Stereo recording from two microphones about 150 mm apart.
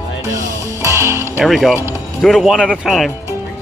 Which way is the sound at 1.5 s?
Centre (ahead or behind).